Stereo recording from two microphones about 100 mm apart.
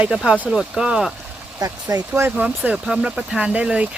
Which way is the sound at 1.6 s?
40° right (ahead or behind).